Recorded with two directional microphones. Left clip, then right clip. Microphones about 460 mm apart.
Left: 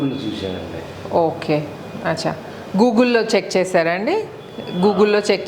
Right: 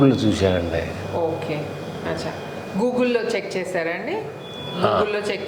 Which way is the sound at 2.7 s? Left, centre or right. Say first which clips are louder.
Left 6 dB; left.